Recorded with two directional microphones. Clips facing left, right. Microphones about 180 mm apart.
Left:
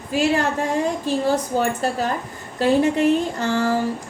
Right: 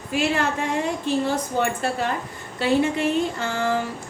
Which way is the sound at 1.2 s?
40° left (ahead or behind).